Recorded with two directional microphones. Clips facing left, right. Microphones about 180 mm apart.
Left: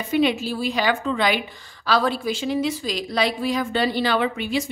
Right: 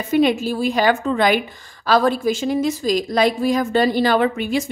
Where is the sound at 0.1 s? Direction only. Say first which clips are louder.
Right 4 dB; 45° right (ahead or behind).